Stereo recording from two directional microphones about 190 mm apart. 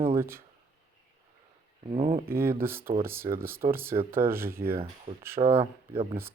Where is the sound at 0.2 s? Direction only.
15° right (ahead or behind).